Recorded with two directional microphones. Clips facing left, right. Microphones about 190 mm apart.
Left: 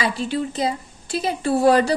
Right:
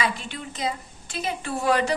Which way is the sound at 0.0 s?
35° left (ahead or behind).